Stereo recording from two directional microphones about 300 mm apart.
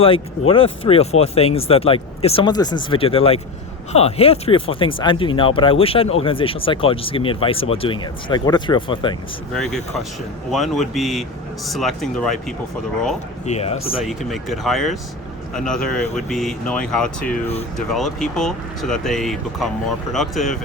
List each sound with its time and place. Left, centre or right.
0.0 s speech: centre
9.6 s speech: centre
13.4 s speech: left
14.0 s speech: centre